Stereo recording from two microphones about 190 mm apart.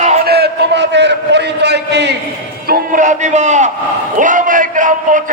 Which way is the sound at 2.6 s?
40° right (ahead or behind).